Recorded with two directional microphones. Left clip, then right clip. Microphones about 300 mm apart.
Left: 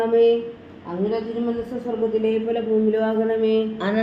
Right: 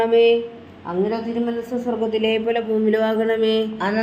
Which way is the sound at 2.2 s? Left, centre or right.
Right.